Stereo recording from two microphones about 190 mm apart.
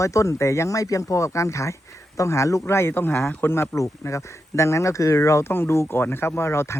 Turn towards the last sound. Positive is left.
turn(degrees=15)  # may be behind; listen again after turning